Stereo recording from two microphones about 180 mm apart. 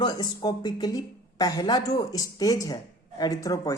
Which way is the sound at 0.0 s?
25° left (ahead or behind).